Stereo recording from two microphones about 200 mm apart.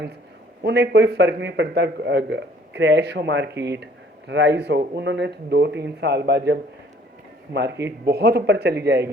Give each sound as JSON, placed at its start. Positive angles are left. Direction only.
{"t": 0.6, "sound": "a man's voice", "side_deg": -55}